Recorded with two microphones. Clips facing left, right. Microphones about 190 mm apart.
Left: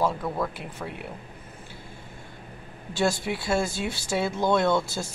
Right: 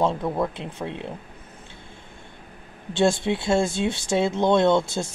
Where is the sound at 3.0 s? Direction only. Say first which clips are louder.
Right 5 dB; 25° right (ahead or behind).